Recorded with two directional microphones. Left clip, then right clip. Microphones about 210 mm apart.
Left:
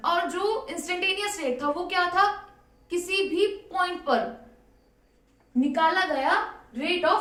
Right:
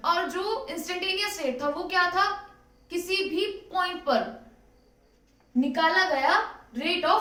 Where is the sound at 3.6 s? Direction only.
15° left (ahead or behind).